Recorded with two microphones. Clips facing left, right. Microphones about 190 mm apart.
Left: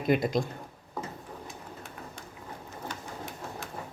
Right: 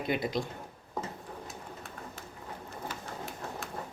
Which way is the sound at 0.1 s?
45° left (ahead or behind).